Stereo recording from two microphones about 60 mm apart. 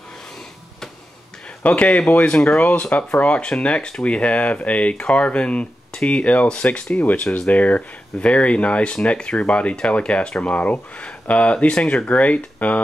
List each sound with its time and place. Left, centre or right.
1.6 s speech: left